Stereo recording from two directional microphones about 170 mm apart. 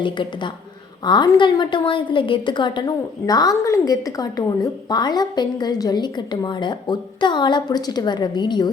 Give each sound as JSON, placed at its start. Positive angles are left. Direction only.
{"t": 0.0, "sound": "a woman's voice", "side_deg": 30}